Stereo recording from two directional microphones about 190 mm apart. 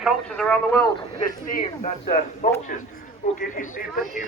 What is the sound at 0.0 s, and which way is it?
Speech, 5° left (ahead or behind).